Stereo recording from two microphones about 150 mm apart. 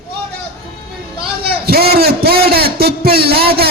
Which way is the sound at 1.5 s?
90° right.